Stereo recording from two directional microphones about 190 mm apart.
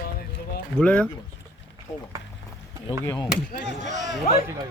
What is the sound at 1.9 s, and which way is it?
Speech, 20° left (ahead or behind).